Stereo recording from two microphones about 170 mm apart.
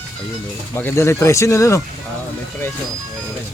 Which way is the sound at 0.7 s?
15° left (ahead or behind).